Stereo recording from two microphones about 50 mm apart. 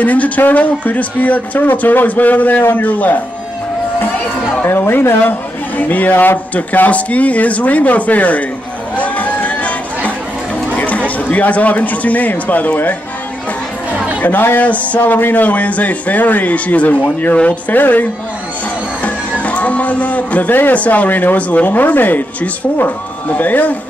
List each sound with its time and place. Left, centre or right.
0.0 s a man's voice: left
4.6 s a woman's voice: left
8.9 s a sound: left
10.7 s speech: left
14.2 s a man's voice: left
15.0 s a man's voice: left
19.4 s a man's voice: left